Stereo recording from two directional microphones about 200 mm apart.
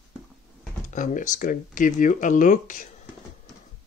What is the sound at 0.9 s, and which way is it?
Speech, 40° left (ahead or behind).